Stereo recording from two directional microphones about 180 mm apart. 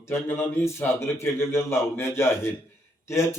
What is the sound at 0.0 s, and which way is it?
Speech, 15° left (ahead or behind).